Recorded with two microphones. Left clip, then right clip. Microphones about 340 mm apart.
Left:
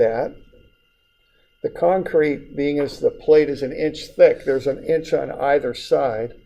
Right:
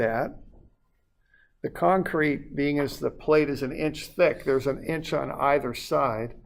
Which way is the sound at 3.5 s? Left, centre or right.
Right.